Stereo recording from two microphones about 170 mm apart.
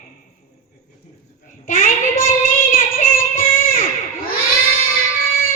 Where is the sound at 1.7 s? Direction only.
55° left (ahead or behind).